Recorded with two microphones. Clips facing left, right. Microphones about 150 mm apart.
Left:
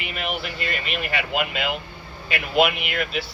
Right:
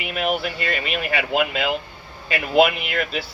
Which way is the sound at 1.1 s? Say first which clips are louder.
Right 4 dB; 40° right (ahead or behind).